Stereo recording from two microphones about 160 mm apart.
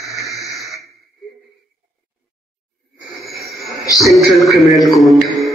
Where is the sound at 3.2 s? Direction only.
Centre (ahead or behind).